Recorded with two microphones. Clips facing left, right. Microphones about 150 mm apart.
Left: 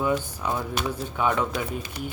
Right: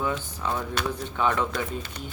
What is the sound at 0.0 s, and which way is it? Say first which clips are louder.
Speech: left 3 dB; 10° left (ahead or behind).